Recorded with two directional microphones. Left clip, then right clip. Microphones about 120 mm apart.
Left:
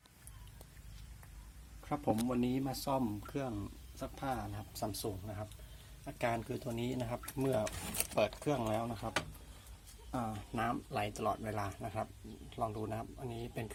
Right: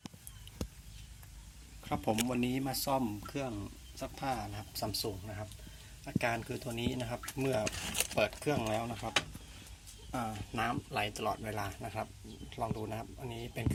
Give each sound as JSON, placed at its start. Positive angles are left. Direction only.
{"t": 1.8, "sound": "speech", "side_deg": 5}
{"t": 10.3, "sound": "speech", "side_deg": 10}